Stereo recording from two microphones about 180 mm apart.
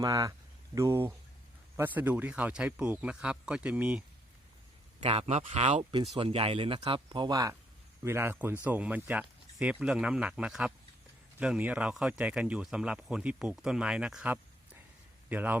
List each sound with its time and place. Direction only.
0.0 s speech: 20° right (ahead or behind)
5.0 s speech: 35° right (ahead or behind); by 15.5 s 10° right (ahead or behind)